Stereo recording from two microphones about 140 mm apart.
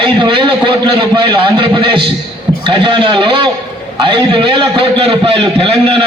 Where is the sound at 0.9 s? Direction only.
35° right (ahead or behind).